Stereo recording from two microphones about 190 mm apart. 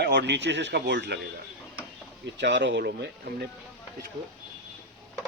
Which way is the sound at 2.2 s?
65° right (ahead or behind).